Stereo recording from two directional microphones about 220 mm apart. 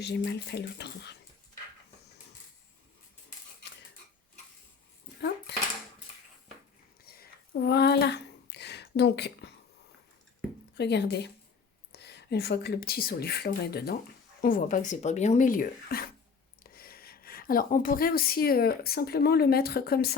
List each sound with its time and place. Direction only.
0.0 s speech: 50° left (ahead or behind)
5.5 s dishes: 50° left (ahead or behind)
7.0 s a sound: 45° left (ahead or behind)
10.8 s a woman's voice: 50° left (ahead or behind)